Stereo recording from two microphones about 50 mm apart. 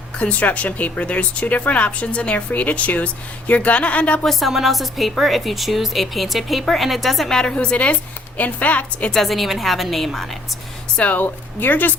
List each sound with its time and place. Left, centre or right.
0.2 s speech: left
4.3 s speech: centre
7.3 s speech: centre
9.1 s speech: centre
10.9 s speech: left